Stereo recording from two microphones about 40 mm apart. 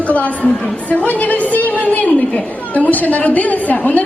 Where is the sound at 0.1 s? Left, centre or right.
Left.